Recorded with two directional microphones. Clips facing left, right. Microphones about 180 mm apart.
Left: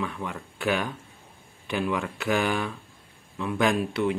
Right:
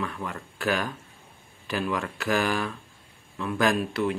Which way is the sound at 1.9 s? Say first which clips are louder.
Even; 15° left (ahead or behind).